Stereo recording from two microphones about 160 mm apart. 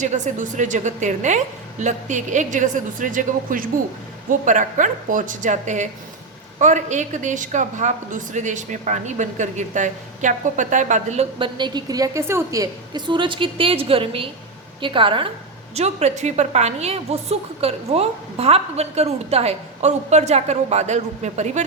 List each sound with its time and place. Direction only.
0.0 s a woman's voice: 50° right (ahead or behind); by 15.3 s 30° right (ahead or behind)
15.7 s a woman's voice: 45° right (ahead or behind)